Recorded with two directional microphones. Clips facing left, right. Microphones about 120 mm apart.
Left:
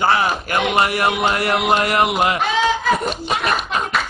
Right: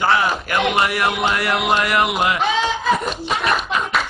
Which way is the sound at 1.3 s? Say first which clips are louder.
Left 1 dB; 35° left (ahead or behind).